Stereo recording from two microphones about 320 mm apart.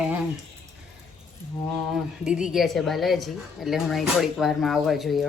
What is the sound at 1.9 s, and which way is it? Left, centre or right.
A woman's voice, centre.